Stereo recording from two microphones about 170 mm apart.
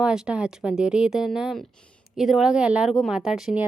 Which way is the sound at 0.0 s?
5° right (ahead or behind).